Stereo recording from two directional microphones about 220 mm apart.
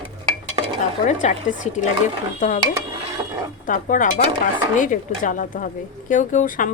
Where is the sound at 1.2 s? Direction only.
35° left (ahead or behind).